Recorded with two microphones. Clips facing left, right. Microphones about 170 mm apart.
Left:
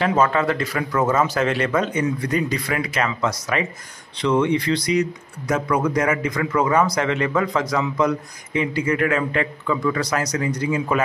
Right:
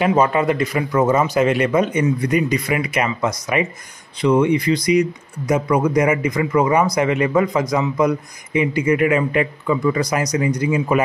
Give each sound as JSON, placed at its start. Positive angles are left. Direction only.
{"t": 0.0, "sound": "speech", "side_deg": -15}